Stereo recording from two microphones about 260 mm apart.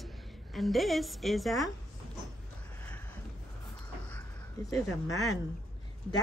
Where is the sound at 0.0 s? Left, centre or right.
Centre.